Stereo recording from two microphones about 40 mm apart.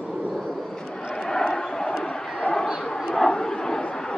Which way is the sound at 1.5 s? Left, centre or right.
Centre.